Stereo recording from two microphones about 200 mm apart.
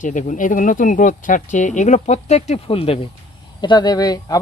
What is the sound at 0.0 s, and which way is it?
Speech, 40° left (ahead or behind).